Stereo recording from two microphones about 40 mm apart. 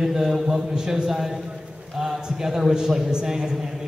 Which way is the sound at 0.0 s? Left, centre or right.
Centre.